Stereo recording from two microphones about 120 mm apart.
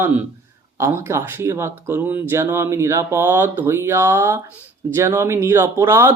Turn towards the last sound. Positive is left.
turn(degrees=-20)  # may be behind; listen again after turning